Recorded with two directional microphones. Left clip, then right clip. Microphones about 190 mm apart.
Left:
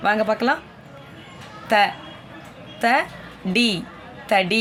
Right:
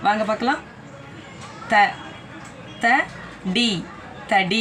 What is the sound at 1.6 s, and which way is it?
Speech, 65° left (ahead or behind).